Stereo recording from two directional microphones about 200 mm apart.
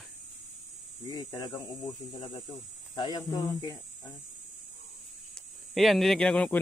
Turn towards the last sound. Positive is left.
turn(degrees=5)  # may be behind; listen again after turning